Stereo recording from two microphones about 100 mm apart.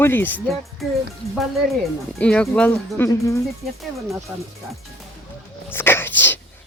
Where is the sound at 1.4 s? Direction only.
Centre (ahead or behind).